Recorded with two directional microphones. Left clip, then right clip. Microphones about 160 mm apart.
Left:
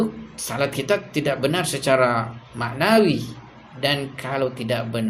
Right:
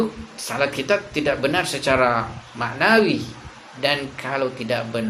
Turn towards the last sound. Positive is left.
turn(degrees=45)  # may be behind; listen again after turning